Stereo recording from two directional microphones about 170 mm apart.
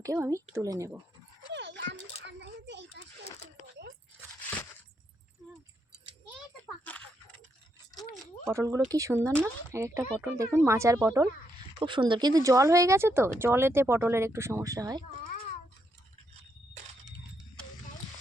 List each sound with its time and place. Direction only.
0.0 s speech: 20° right (ahead or behind)
1.5 s a sound: 90° right
8.5 s speech: 20° right (ahead or behind)